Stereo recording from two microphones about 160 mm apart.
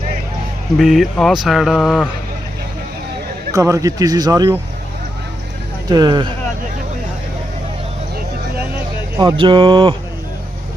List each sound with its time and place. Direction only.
0.8 s speech: centre (ahead or behind)
3.5 s speech: 20° right (ahead or behind)
5.9 s speech: 25° right (ahead or behind)
9.1 s speech: 30° right (ahead or behind)